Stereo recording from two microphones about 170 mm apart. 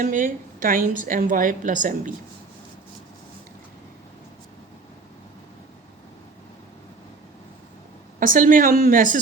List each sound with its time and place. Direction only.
0.0 s a woman's voice: 50° right (ahead or behind)
8.2 s a woman's voice: 55° right (ahead or behind)